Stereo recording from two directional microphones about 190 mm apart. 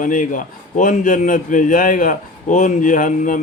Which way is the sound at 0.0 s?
45° left (ahead or behind).